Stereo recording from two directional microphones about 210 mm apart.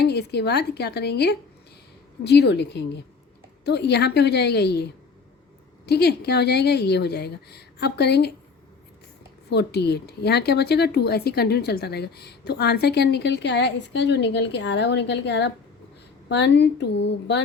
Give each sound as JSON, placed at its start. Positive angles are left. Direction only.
{"t": 0.0, "sound": "speech", "side_deg": 50}
{"t": 9.5, "sound": "a woman's voice", "side_deg": 50}